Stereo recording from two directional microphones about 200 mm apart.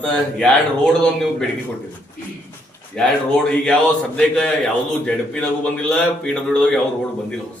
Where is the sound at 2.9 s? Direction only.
5° left (ahead or behind).